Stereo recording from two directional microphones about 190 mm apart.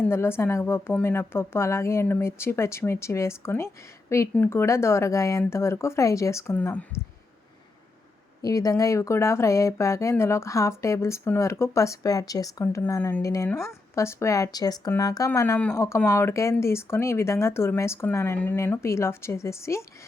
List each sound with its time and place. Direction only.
0.0 s speech: 10° left (ahead or behind)
8.4 s speech: 20° left (ahead or behind)